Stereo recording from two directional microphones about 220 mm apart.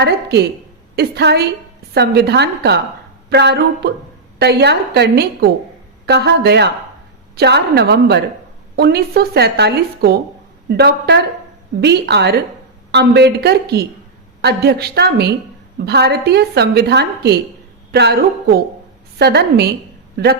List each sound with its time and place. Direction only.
0.0 s a woman's voice: 50° right (ahead or behind)